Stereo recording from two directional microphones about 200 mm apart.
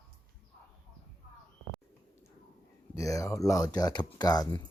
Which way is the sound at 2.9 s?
15° left (ahead or behind).